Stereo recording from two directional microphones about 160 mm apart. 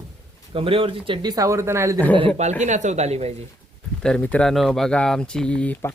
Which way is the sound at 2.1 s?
40° right (ahead or behind).